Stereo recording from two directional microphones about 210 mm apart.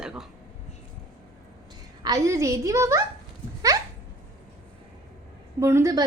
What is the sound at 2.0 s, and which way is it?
A woman's voice, 15° right (ahead or behind).